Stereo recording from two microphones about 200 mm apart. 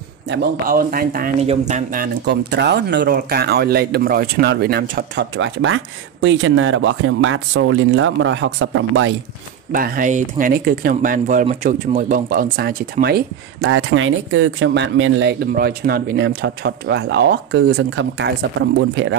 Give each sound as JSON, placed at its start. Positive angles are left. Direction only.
{"t": 0.3, "sound": "speech", "side_deg": -50}
{"t": 1.4, "sound": "speech", "side_deg": -35}
{"t": 5.3, "sound": "speech", "side_deg": -70}
{"t": 9.7, "sound": "speech", "side_deg": -45}
{"t": 13.7, "sound": "speech", "side_deg": -75}
{"t": 15.5, "sound": "speech", "side_deg": -50}